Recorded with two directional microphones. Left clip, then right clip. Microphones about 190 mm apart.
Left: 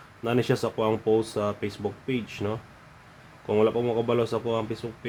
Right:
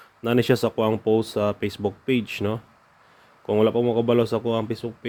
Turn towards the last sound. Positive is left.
turn(degrees=-35)  # may be behind; listen again after turning